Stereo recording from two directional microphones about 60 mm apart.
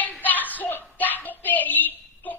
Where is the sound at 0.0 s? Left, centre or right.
Left.